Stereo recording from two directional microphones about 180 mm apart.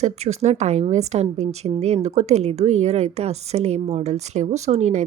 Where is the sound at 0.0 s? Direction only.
35° right (ahead or behind).